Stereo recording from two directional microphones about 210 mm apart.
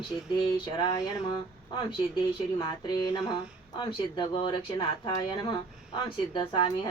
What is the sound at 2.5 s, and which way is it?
Speech, 20° left (ahead or behind).